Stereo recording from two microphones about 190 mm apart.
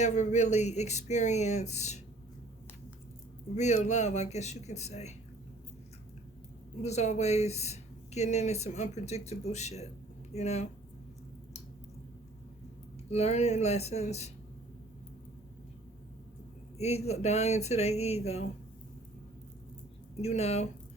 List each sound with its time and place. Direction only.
0.0 s speech: 35° left (ahead or behind)
3.5 s speech: 35° left (ahead or behind)
6.8 s speech: 35° left (ahead or behind)
13.1 s speech: 35° left (ahead or behind)
16.7 s speech: 35° left (ahead or behind)
20.2 s speech: 35° left (ahead or behind)